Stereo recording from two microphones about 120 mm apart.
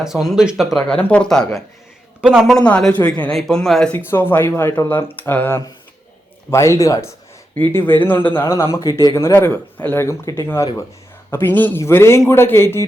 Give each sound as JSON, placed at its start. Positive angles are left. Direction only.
{"t": 0.0, "sound": "speech", "side_deg": 0}
{"t": 2.6, "sound": "speech", "side_deg": 10}
{"t": 3.9, "sound": "speech", "side_deg": 15}
{"t": 7.5, "sound": "speech", "side_deg": 15}